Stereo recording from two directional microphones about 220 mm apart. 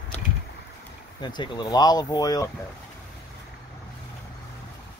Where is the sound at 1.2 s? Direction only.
20° left (ahead or behind).